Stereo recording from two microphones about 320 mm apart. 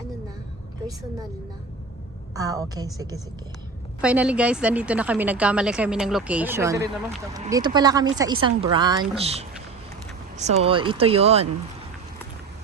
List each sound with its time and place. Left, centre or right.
2.3 s a woman's voice: centre